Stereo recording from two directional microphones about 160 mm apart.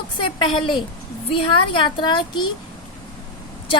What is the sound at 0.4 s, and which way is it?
Speech, 30° left (ahead or behind).